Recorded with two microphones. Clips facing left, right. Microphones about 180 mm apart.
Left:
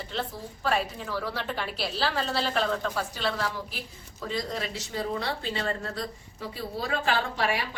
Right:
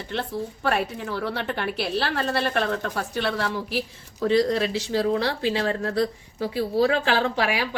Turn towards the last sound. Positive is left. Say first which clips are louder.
# right 5 dB
turn(degrees=-90)